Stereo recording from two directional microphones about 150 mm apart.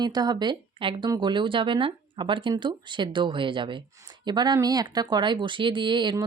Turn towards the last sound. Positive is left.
turn(degrees=-30)  # may be behind; listen again after turning